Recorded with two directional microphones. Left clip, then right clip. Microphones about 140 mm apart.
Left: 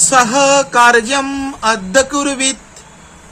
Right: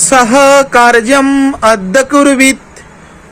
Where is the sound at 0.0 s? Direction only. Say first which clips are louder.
Right 5 dB; 50° right (ahead or behind).